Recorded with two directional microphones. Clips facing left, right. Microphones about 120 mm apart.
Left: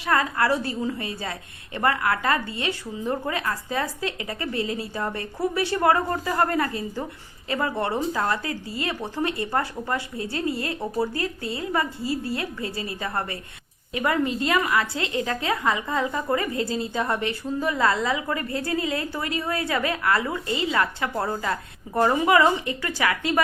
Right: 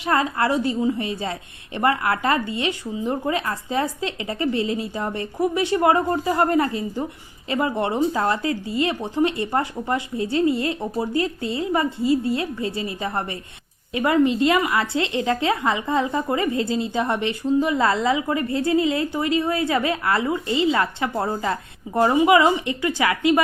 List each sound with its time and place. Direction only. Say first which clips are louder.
0.0 s a woman's voice: right 2 dB; 25° right (ahead or behind)